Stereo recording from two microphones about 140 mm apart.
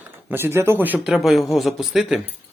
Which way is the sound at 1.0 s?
Centre (ahead or behind).